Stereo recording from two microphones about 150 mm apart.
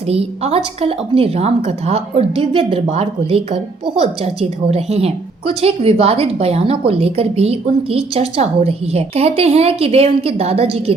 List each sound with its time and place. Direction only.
0.1 s a woman's voice: 40° right (ahead or behind)